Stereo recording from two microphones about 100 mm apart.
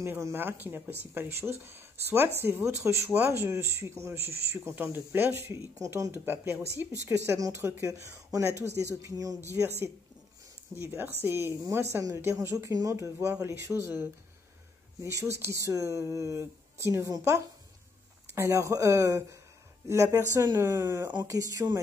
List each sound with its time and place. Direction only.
0.0 s speech: 25° right (ahead or behind)
10.8 s speech: 25° right (ahead or behind)
15.0 s speech: 30° right (ahead or behind)
21.2 s speech: 35° right (ahead or behind)